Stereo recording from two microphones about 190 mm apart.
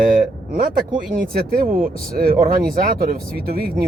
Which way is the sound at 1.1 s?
50° right (ahead or behind).